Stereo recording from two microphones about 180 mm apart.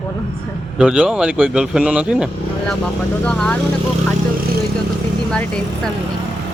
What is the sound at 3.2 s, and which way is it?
Speech, 5° left (ahead or behind).